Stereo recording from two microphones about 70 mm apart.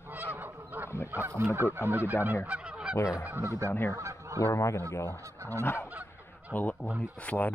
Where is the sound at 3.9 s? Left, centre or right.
Right.